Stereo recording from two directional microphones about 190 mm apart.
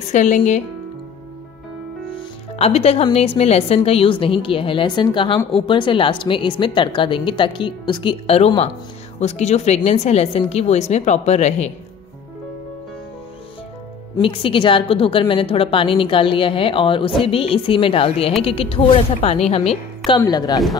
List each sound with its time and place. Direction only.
0.1 s speech: 40° left (ahead or behind)
2.1 s a woman's voice: 30° left (ahead or behind)
14.2 s a woman's voice: 30° left (ahead or behind)
20.1 s a woman's voice: 20° left (ahead or behind)